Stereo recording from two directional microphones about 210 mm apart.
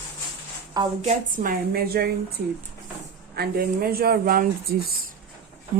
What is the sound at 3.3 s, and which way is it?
A woman's voice, 45° right (ahead or behind).